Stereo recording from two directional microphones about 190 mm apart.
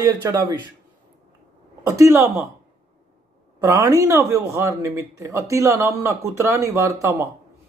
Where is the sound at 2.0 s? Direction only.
15° right (ahead or behind).